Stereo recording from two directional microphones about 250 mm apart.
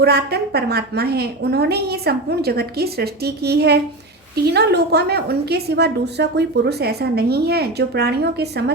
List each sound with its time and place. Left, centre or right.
0.0 s a woman's voice: right